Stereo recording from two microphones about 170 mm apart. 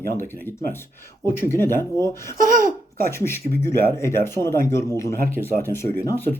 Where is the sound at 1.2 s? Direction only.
15° left (ahead or behind).